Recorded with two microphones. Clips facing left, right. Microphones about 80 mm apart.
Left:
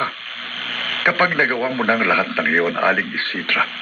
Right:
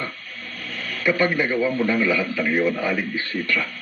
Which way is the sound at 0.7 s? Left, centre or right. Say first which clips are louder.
Left 3 dB; left.